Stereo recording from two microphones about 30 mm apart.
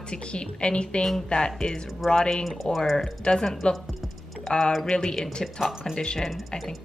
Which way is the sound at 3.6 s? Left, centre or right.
Left.